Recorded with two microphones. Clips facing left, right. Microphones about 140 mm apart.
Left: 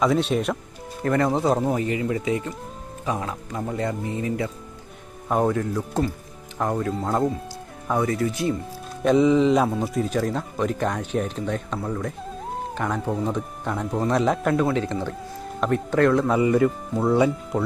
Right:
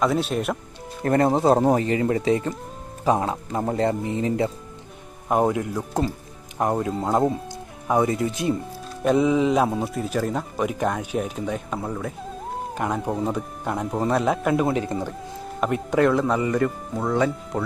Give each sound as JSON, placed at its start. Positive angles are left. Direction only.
{"t": 0.0, "sound": "speech", "side_deg": 0}
{"t": 1.0, "sound": "speech", "side_deg": -40}
{"t": 4.0, "sound": "speech", "side_deg": -25}
{"t": 5.3, "sound": "speech", "side_deg": -10}
{"t": 9.0, "sound": "speech", "side_deg": -5}